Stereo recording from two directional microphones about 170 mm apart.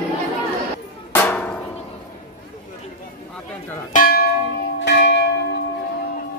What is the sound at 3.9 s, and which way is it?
Music, 60° left (ahead or behind).